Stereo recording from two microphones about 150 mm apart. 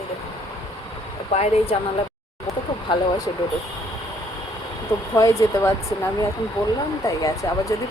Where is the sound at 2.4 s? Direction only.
25° left (ahead or behind).